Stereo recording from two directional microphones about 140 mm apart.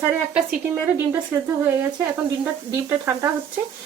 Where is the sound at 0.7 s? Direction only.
15° right (ahead or behind).